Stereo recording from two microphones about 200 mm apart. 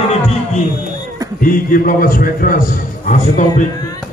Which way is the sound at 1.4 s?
45° left (ahead or behind).